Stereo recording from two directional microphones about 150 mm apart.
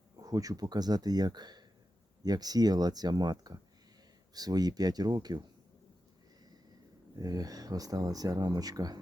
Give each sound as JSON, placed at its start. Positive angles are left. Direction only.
{"t": 0.2, "sound": "speech", "side_deg": -25}
{"t": 7.2, "sound": "speech", "side_deg": -25}